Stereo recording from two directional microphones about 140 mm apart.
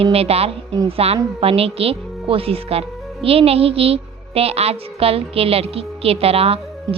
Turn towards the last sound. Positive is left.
turn(degrees=-45)  # may be behind; listen again after turning